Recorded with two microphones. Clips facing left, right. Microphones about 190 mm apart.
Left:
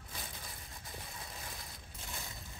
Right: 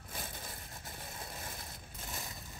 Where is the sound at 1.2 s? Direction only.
50° right (ahead or behind).